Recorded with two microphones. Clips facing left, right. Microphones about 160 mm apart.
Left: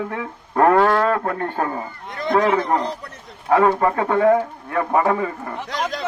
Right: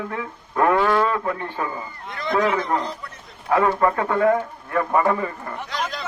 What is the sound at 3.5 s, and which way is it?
A man's voice, 30° left (ahead or behind).